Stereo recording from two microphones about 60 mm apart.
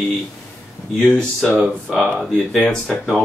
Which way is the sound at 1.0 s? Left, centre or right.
Left.